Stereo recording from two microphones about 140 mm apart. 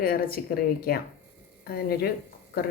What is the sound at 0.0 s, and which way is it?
Speech, 90° left.